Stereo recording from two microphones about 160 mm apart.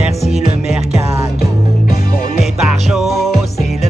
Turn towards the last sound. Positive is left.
turn(degrees=0)  # may be behind; listen again after turning